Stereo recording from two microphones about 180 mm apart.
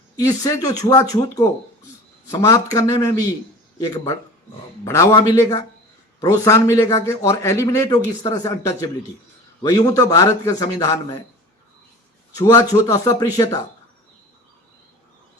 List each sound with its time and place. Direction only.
0.2 s a man's voice: 20° left (ahead or behind)
12.4 s a man's voice: 15° left (ahead or behind)